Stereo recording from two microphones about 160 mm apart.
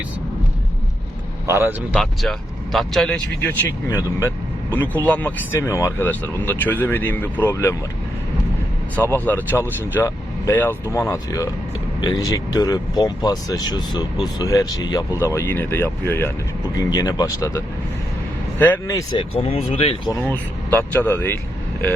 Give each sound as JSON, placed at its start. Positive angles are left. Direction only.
{"t": 1.5, "sound": "speech", "side_deg": -15}
{"t": 2.7, "sound": "speech", "side_deg": 0}
{"t": 3.8, "sound": "speech", "side_deg": 15}
{"t": 9.0, "sound": "speech", "side_deg": 10}
{"t": 18.6, "sound": "speech", "side_deg": 10}
{"t": 18.9, "sound": "speech", "side_deg": 30}
{"t": 20.2, "sound": "speech", "side_deg": 10}